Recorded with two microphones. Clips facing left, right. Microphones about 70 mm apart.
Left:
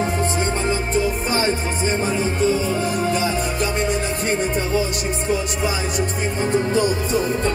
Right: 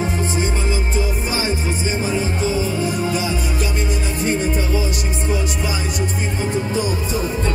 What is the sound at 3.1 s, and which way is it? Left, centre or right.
Music, centre.